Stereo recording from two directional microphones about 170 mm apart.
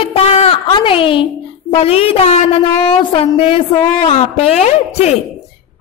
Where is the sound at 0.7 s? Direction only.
30° left (ahead or behind).